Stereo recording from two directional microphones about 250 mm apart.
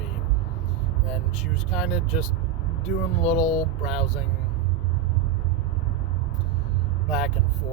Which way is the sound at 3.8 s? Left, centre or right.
Centre.